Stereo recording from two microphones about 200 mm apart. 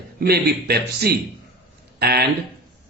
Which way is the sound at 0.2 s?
50° right (ahead or behind).